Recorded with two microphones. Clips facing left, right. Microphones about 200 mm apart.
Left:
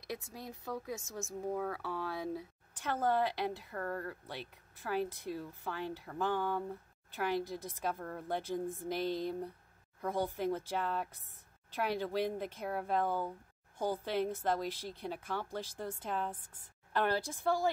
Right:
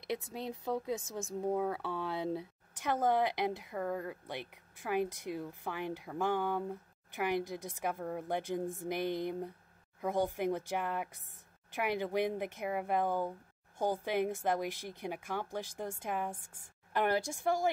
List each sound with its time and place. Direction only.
0.0 s speech: 25° right (ahead or behind)